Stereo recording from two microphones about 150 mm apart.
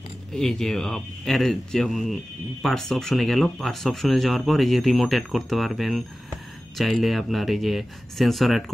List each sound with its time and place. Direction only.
0.3 s speech: 5° left (ahead or behind)